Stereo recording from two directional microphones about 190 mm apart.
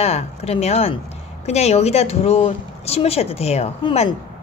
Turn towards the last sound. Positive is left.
turn(degrees=30)  # may be behind; listen again after turning